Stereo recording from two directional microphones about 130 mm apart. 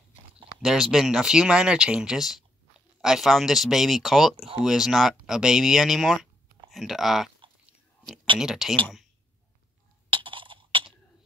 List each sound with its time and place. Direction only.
0.6 s speech: 5° right (ahead or behind)
8.4 s speech: 5° right (ahead or behind)
10.0 s a sound: 40° right (ahead or behind)